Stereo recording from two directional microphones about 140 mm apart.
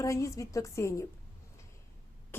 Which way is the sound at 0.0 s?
20° left (ahead or behind).